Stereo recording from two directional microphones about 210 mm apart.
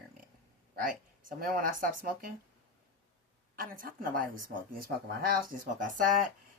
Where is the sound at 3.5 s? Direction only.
45° right (ahead or behind).